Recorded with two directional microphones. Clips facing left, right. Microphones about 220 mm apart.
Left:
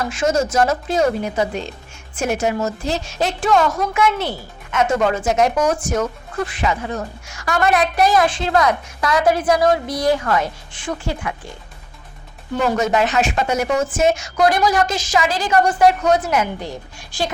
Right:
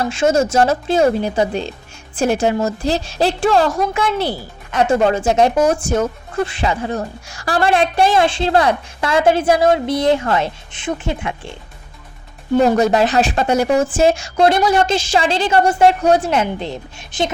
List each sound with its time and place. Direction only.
0.0 s a woman's voice: 30° right (ahead or behind)
12.5 s a woman's voice: 35° right (ahead or behind)